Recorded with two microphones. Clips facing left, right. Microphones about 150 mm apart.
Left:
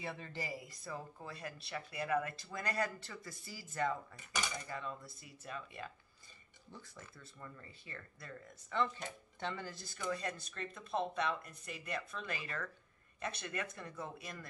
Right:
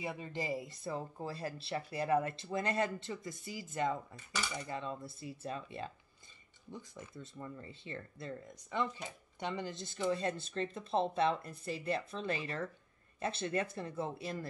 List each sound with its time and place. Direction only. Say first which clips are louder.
0.0 s speech: right 4 dB; 15° right (ahead or behind)
6.7 s speech: right 6 dB; 20° right (ahead or behind)
8.7 s speech: even; 15° right (ahead or behind); by 14.5 s 30° right (ahead or behind)